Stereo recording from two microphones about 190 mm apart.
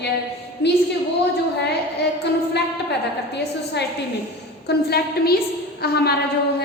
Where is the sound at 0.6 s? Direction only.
60° left (ahead or behind).